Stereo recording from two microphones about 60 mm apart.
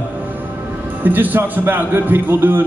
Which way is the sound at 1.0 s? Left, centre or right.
Right.